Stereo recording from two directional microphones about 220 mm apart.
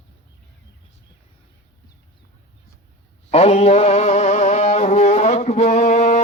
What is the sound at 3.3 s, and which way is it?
Music, 30° left (ahead or behind).